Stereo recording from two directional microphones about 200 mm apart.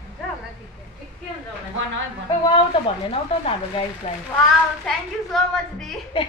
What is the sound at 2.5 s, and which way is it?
A woman's voice, 25° left (ahead or behind).